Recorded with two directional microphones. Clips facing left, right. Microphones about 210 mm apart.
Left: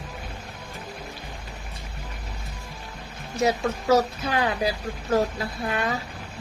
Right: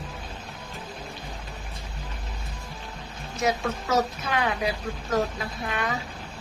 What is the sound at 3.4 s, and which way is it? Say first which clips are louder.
Speech: left 3 dB; 35° left (ahead or behind).